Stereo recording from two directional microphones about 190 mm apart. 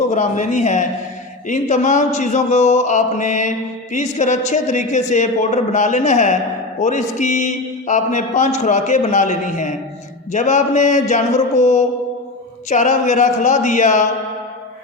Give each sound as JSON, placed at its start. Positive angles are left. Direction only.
{"t": 0.1, "sound": "a man's voice", "side_deg": 40}